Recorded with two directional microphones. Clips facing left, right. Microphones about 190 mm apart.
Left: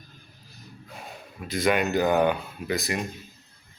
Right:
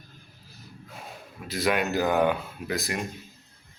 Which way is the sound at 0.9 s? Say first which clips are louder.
Left 1 dB; centre (ahead or behind).